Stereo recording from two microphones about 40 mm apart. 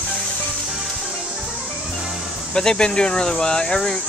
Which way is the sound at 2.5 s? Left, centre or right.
Left.